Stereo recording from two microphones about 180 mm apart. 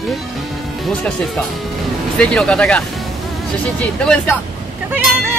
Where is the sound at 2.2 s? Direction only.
5° left (ahead or behind).